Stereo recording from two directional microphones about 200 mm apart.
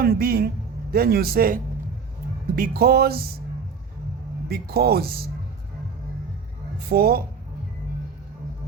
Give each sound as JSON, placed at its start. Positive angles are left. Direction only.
{"t": 0.0, "sound": "speech", "side_deg": -50}
{"t": 4.4, "sound": "speech", "side_deg": -50}
{"t": 6.8, "sound": "speech", "side_deg": -50}